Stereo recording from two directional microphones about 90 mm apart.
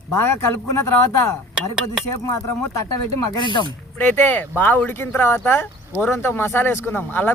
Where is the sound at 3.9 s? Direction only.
25° left (ahead or behind).